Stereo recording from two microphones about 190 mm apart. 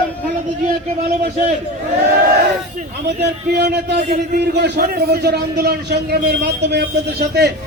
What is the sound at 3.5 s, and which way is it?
A man's voice, 55° right (ahead or behind).